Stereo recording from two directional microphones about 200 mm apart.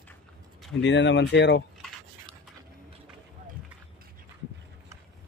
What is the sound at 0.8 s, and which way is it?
Speech, 65° left (ahead or behind).